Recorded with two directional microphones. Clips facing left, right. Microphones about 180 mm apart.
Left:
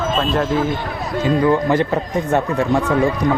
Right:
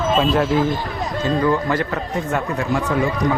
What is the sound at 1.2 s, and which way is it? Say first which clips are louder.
Speech: left 3 dB; 20° left (ahead or behind).